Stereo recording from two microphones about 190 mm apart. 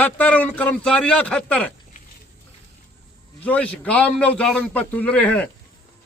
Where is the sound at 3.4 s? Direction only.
5° left (ahead or behind).